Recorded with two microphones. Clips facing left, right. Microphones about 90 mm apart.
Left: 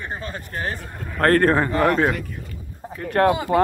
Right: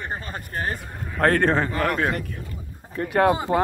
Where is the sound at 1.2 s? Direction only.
Centre (ahead or behind).